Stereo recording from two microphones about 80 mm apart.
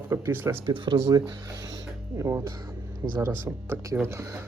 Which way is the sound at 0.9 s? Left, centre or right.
Right.